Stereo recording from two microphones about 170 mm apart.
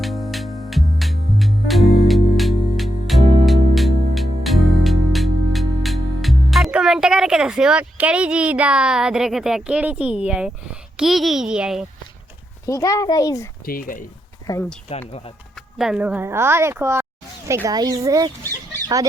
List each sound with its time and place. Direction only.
0.0 s music: centre (ahead or behind)
12.6 s a child's voice: 20° left (ahead or behind)
13.7 s speech: 55° left (ahead or behind)
14.4 s speech: 20° left (ahead or behind)
15.8 s speech: 5° right (ahead or behind); by 18.3 s 20° right (ahead or behind)